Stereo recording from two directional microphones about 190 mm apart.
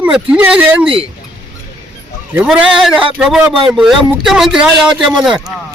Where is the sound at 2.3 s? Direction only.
5° right (ahead or behind).